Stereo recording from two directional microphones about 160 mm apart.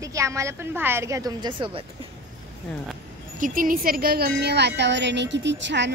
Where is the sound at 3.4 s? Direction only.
60° right (ahead or behind).